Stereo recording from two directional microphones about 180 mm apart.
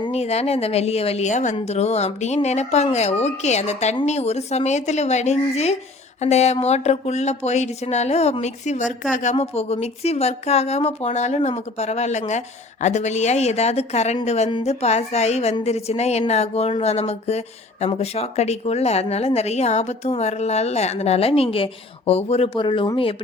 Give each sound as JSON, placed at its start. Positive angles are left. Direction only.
{"t": 0.0, "sound": "a woman's voice", "side_deg": 35}